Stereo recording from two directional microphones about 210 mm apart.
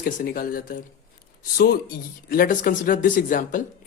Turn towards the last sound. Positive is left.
turn(degrees=40)  # may be behind; listen again after turning